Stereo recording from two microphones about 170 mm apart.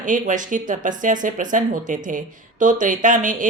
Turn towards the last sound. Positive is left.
turn(degrees=-50)  # may be behind; listen again after turning